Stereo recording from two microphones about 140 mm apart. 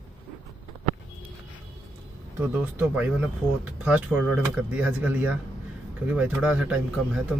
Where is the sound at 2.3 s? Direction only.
15° right (ahead or behind).